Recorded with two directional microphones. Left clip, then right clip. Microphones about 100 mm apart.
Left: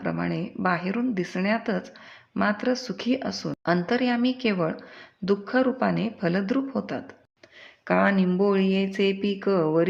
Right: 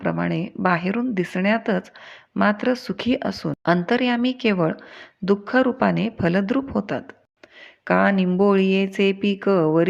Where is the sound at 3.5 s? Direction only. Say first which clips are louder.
Right 4 dB; 35° right (ahead or behind).